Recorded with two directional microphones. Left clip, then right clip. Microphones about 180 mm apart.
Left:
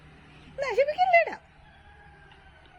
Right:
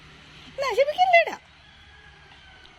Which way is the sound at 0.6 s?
30° right (ahead or behind).